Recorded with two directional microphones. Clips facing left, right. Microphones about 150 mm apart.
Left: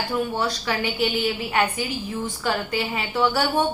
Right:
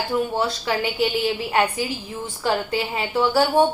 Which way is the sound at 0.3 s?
25° right (ahead or behind).